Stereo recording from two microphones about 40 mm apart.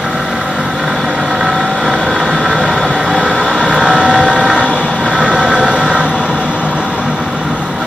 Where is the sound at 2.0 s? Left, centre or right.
Centre.